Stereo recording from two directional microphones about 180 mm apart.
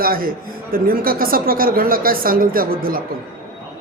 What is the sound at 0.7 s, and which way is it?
A woman's voice, 55° right (ahead or behind).